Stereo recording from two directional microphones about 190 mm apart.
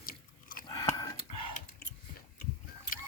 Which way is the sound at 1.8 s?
55° left (ahead or behind).